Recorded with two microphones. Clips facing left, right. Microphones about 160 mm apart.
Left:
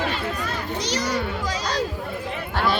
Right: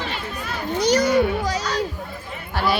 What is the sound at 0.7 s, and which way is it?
Speech, 55° right (ahead or behind).